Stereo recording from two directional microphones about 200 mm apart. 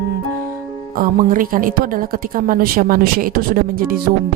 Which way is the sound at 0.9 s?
45° right (ahead or behind).